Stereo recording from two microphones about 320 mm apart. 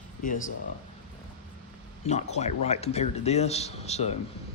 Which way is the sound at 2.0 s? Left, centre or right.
Left.